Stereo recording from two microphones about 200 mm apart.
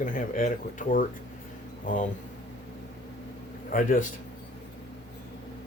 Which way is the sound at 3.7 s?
40° left (ahead or behind).